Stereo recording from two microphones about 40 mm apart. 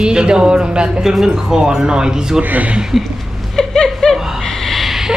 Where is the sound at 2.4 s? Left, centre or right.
Right.